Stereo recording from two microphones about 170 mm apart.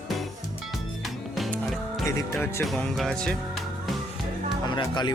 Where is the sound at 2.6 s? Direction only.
Centre (ahead or behind).